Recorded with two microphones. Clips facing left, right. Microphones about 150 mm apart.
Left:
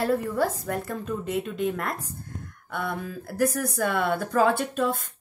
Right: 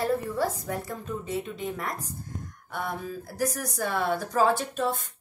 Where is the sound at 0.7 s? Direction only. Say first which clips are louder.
Left 3 dB; 65° left (ahead or behind).